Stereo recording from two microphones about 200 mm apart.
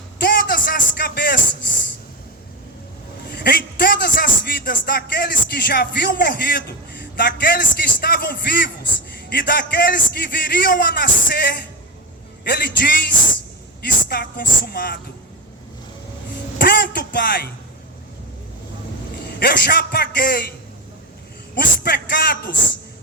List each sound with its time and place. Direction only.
0.2 s a sound: 45° left (ahead or behind)
3.2 s a man's voice: 50° left (ahead or behind)
16.6 s speech: 50° left (ahead or behind)
19.4 s a man's voice: 50° left (ahead or behind)
21.6 s a man's voice: 50° left (ahead or behind)